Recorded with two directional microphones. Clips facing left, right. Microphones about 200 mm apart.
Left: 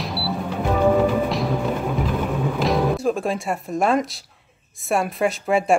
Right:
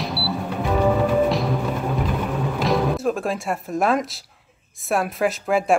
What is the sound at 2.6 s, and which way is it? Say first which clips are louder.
Speech: even; centre (ahead or behind).